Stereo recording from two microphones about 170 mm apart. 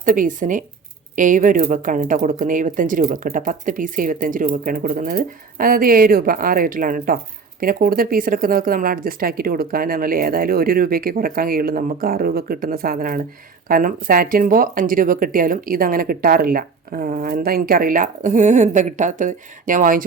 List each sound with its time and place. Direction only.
0.0 s speech: 50° right (ahead or behind)